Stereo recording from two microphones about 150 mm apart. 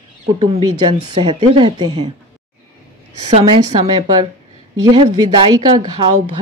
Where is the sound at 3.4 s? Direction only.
35° right (ahead or behind).